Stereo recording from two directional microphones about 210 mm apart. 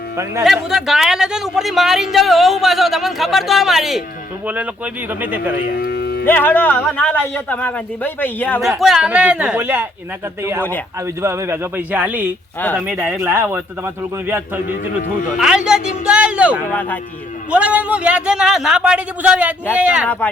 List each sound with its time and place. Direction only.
0.4 s a man's voice: centre (ahead or behind)
5.8 s a sound: 50° left (ahead or behind)
6.2 s speech: 10° left (ahead or behind)
8.8 s speech: centre (ahead or behind)
11.0 s a man's voice: 15° right (ahead or behind)
12.5 s speech: 10° left (ahead or behind)
12.8 s a man's voice: 10° right (ahead or behind)
20.1 s speech: 5° left (ahead or behind)